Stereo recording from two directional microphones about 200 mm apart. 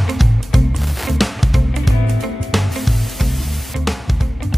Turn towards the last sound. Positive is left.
turn(degrees=0)  # may be behind; listen again after turning